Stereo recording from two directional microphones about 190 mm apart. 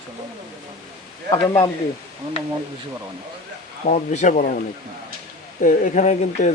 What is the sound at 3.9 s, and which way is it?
Speech, 40° left (ahead or behind).